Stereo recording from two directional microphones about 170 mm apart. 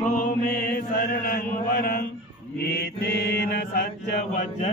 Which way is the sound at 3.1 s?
70° left (ahead or behind).